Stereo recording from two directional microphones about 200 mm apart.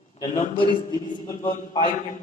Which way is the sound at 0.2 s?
25° left (ahead or behind).